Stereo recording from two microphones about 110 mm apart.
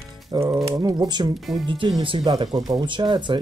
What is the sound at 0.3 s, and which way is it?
Speech, 40° right (ahead or behind).